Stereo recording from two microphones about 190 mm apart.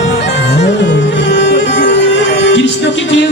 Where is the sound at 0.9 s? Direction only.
70° left (ahead or behind).